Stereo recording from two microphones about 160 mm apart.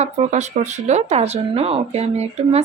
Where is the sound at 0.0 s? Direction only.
45° right (ahead or behind).